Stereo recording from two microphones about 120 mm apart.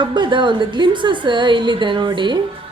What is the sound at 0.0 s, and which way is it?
A woman's voice, 40° right (ahead or behind).